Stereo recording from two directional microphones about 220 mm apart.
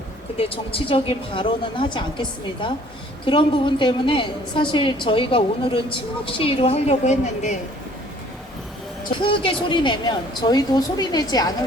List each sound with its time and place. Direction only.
0.3 s a woman's voice: 25° left (ahead or behind)
9.1 s a woman's voice: 25° left (ahead or behind)